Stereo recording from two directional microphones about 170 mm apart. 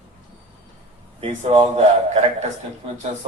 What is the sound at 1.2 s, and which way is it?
A man's voice, 35° right (ahead or behind).